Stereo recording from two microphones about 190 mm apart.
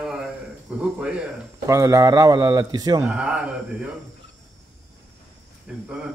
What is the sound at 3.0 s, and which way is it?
Speech, 5° right (ahead or behind).